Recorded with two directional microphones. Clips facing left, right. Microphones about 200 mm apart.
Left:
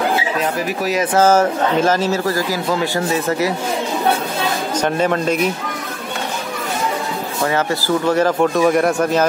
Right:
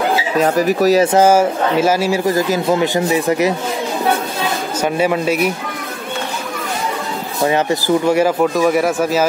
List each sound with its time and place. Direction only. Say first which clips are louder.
0.4 s speech: right 7 dB; 40° right (ahead or behind)
1.1 s speech: right 2 dB; 10° right (ahead or behind)
4.8 s speech: right 2 dB; 10° right (ahead or behind)
7.4 s speech: right 4 dB; 20° right (ahead or behind)